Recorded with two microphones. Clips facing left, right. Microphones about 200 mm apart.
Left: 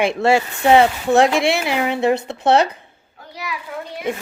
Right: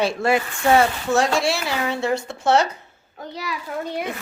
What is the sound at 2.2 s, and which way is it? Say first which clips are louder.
Speech: left 4 dB; 60° left (ahead or behind).